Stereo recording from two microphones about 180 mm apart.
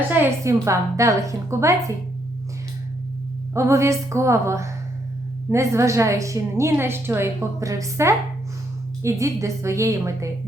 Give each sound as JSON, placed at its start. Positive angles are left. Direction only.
{"t": 0.1, "sound": "a woman's voice", "side_deg": -15}
{"t": 3.5, "sound": "a woman's voice", "side_deg": -15}